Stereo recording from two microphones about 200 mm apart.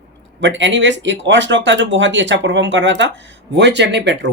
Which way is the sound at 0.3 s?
65° right (ahead or behind).